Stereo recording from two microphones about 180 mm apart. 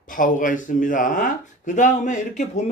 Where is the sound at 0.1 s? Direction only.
50° left (ahead or behind).